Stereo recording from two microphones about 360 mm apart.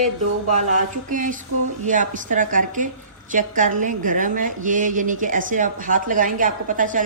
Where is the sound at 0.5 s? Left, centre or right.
Right.